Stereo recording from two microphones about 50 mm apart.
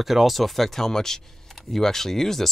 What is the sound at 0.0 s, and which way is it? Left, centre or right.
Speech, centre.